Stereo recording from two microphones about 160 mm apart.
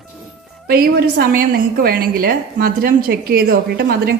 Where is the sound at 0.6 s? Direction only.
70° right (ahead or behind).